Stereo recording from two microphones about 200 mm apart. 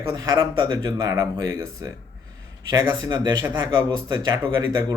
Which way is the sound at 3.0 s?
20° right (ahead or behind).